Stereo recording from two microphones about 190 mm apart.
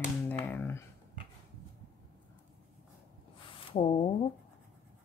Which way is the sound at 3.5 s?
30° left (ahead or behind).